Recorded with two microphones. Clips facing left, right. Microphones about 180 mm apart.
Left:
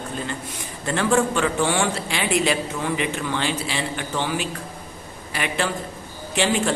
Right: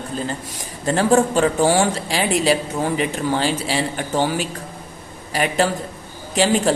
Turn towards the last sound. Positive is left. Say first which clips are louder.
# right 4 dB
turn(degrees=-40)  # may be behind; listen again after turning